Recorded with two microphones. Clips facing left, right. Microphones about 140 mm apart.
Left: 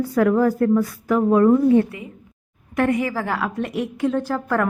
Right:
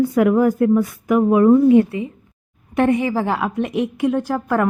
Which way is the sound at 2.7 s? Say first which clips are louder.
Right 3 dB; 25° right (ahead or behind).